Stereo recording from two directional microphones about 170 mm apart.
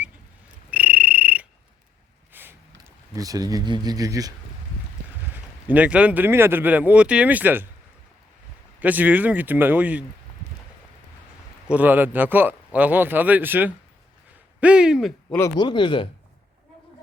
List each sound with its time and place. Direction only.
0.7 s a sound: 10° right (ahead or behind)
5.6 s speech: 10° right (ahead or behind)
8.8 s speech: 10° right (ahead or behind)
11.7 s speech: 10° right (ahead or behind)
15.4 s speech: 20° left (ahead or behind)